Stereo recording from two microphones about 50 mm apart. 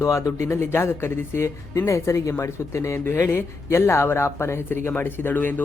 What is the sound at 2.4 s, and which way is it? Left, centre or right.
Speech, left.